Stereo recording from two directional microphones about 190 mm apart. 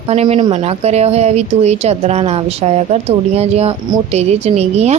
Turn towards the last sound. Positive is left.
turn(degrees=-35)  # may be behind; listen again after turning